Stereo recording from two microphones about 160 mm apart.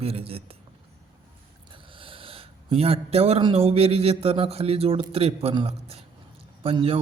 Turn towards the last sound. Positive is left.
turn(degrees=-35)  # may be behind; listen again after turning